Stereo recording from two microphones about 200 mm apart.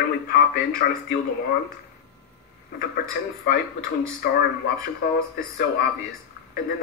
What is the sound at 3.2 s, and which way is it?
Speech, 50° left (ahead or behind).